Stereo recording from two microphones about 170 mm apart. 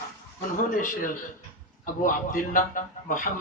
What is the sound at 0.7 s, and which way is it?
A man's voice, 50° left (ahead or behind).